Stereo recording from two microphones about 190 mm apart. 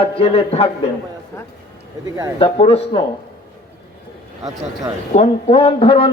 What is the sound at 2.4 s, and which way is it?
Speech, 30° left (ahead or behind).